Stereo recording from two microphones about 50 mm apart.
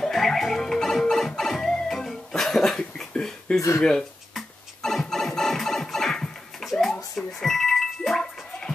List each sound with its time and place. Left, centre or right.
0.0 s music: centre
3.0 s a sound: centre
4.3 s scratching: centre
8.2 s gargling: centre